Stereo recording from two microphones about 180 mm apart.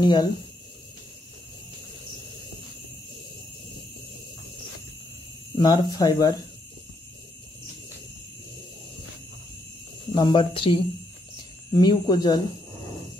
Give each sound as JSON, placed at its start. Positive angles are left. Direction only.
{"t": 0.0, "sound": "speech", "side_deg": 25}
{"t": 5.6, "sound": "speech", "side_deg": 20}
{"t": 10.1, "sound": "speech", "side_deg": 25}